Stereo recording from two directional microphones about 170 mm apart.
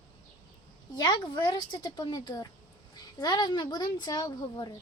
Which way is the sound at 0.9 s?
25° left (ahead or behind).